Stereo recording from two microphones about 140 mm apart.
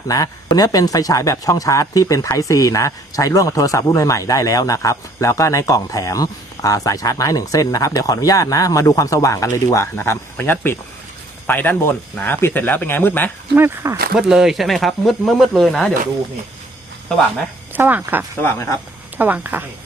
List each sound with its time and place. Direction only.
0.1 s speech: 25° left (ahead or behind)
13.6 s speech: 15° right (ahead or behind)
14.2 s speech: 5° right (ahead or behind)
17.7 s speech: 15° right (ahead or behind)
18.4 s speech: 20° left (ahead or behind)
19.1 s speech: 15° right (ahead or behind)